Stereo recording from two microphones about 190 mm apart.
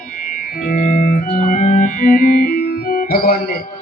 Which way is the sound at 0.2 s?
50° left (ahead or behind).